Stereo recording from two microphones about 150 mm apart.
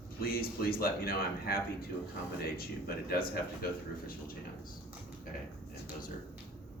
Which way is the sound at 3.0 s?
85° left.